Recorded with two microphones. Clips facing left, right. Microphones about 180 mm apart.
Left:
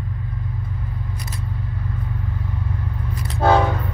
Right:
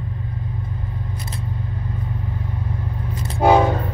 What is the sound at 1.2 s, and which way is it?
Vehicle, 25° right (ahead or behind).